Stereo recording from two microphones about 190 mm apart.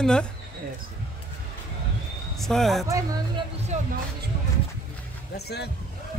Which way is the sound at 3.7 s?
35° right (ahead or behind).